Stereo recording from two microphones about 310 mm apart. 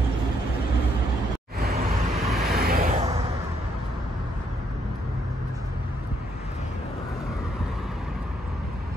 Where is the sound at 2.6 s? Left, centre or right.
Right.